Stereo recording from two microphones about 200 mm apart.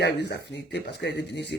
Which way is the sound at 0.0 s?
55° left (ahead or behind).